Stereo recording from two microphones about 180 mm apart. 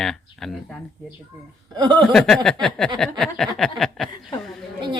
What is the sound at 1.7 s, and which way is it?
Speech, 20° right (ahead or behind).